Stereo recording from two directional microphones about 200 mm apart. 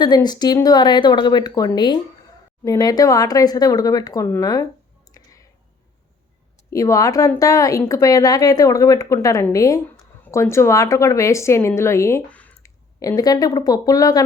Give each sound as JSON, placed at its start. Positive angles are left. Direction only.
{"t": 0.0, "sound": "speech", "side_deg": 20}
{"t": 5.1, "sound": "clicking", "side_deg": 15}
{"t": 6.7, "sound": "a woman's voice", "side_deg": 15}